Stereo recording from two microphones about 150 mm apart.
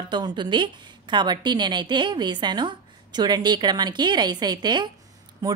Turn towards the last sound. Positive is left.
turn(degrees=-25)  # may be behind; listen again after turning